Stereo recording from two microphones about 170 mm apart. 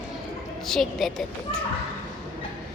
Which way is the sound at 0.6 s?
Centre (ahead or behind).